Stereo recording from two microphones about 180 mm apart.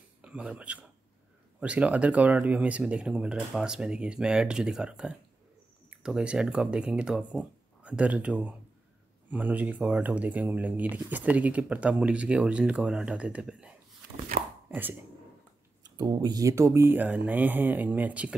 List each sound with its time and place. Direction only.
0.2 s a man's voice: 5° right (ahead or behind)
14.4 s chopping: 55° right (ahead or behind)
14.7 s speech: 10° right (ahead or behind)
15.8 s speech: 20° right (ahead or behind)